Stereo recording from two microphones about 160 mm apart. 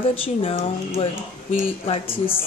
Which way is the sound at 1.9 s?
35° left (ahead or behind).